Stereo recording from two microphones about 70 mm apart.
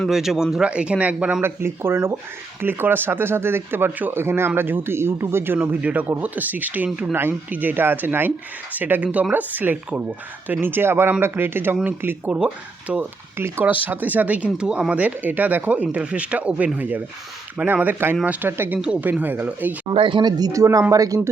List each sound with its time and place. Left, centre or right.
0.1 s speech: centre
1.4 s speech: right
5.8 s speech: right
7.1 s speech: right
18.8 s speech: centre
19.2 s speech: right
20.5 s speech: right